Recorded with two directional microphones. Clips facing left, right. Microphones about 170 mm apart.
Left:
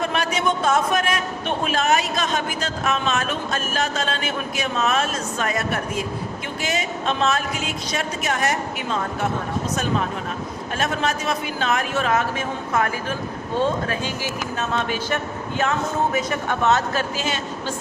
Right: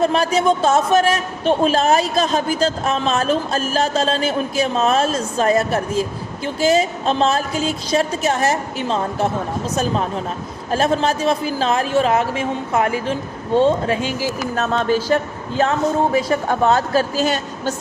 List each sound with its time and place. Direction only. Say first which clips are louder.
0.0 s a man's voice: right 6 dB; 35° right (ahead or behind)
14.3 s a man's voice: right 6 dB; 35° right (ahead or behind)